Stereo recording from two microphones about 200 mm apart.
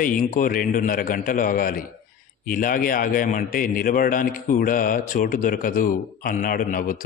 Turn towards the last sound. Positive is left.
turn(degrees=45)  # may be behind; listen again after turning